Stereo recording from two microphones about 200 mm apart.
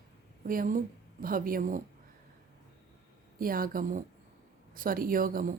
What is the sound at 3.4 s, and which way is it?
A woman's voice, 45° right (ahead or behind).